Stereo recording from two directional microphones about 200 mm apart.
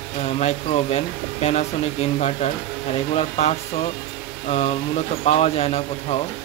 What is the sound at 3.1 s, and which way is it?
Speech, 30° left (ahead or behind).